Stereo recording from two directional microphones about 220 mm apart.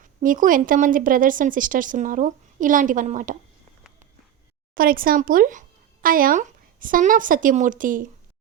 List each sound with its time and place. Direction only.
0.2 s a woman's voice: 40° right (ahead or behind)
4.7 s speech: 40° right (ahead or behind)